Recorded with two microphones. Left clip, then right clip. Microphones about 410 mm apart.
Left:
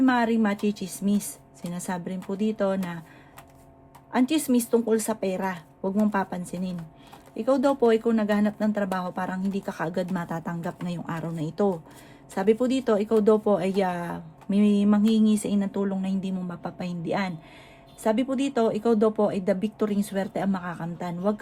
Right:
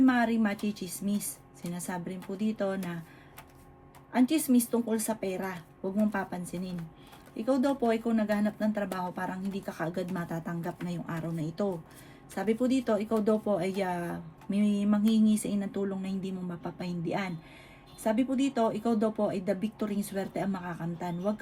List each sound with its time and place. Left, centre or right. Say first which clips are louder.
0.0 s speech: left 4 dB; left
4.1 s speech: left 3 dB; left